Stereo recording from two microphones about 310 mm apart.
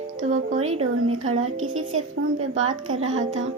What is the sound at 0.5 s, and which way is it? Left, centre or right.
Speech, right.